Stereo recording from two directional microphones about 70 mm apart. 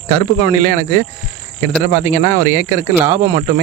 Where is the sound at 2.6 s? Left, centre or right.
Right.